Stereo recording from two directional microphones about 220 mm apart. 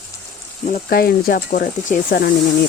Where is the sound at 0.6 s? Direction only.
35° left (ahead or behind).